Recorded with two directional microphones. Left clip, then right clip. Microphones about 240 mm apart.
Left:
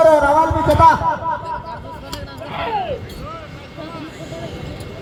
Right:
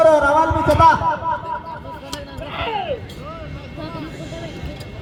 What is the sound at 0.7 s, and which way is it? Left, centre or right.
Speech, right.